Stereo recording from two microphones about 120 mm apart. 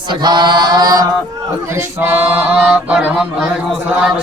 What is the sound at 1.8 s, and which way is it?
Music, 15° right (ahead or behind).